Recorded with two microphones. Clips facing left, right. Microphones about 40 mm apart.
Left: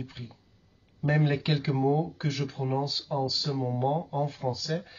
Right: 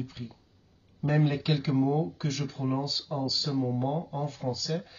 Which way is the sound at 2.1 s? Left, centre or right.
Left.